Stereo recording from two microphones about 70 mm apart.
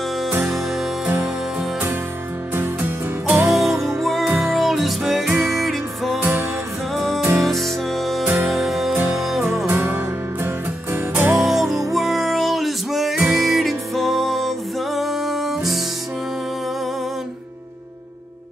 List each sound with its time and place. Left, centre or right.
2.5 s music: right
3.4 s music: centre
9.7 s music: right
11.3 s music: centre